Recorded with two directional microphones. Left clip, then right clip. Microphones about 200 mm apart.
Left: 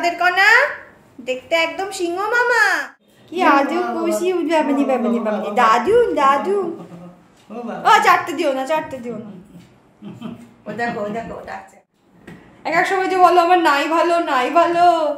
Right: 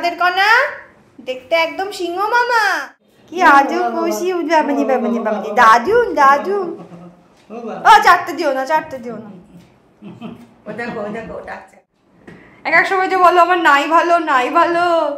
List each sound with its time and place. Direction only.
0.0 s a child's voice: centre (ahead or behind)
7.5 s a man's voice: 20° left (ahead or behind)
7.8 s a child's voice: centre (ahead or behind)
12.6 s a child's voice: 5° right (ahead or behind)